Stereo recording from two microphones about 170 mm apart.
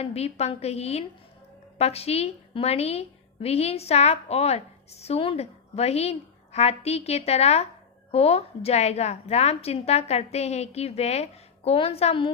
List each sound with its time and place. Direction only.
0.0 s a woman's voice: 35° left (ahead or behind)